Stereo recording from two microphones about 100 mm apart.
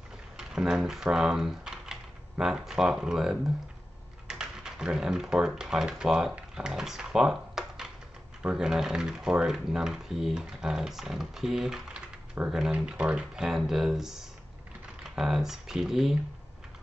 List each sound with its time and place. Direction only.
0.4 s speech: 5° right (ahead or behind)